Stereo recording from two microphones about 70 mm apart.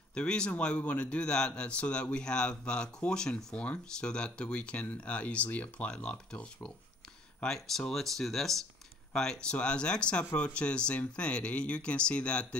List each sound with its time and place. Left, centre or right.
0.1 s a man's voice: centre